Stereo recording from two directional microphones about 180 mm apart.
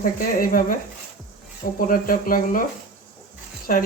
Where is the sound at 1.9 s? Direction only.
50° left (ahead or behind).